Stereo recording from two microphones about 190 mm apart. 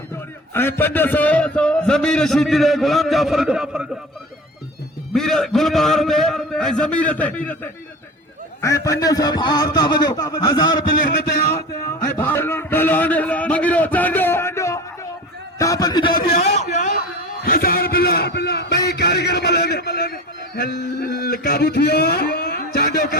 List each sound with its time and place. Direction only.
0.5 s a man's voice: 10° left (ahead or behind)
5.1 s a man's voice: centre (ahead or behind); by 10.8 s 25° left (ahead or behind)
11.5 s a sound: 15° left (ahead or behind)
16.6 s a man's voice: 40° left (ahead or behind)
17.4 s a man's voice: 50° left (ahead or behind)